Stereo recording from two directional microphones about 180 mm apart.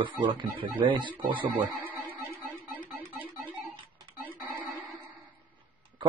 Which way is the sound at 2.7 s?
10° left (ahead or behind).